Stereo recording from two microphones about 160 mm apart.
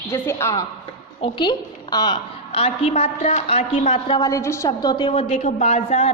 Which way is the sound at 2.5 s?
35° left (ahead or behind).